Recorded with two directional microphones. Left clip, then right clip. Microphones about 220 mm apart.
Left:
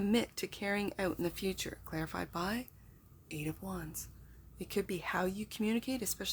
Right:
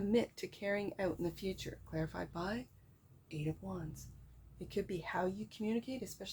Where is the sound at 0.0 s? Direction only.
25° left (ahead or behind).